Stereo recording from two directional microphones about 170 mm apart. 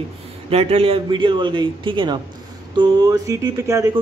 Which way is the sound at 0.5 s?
35° right (ahead or behind).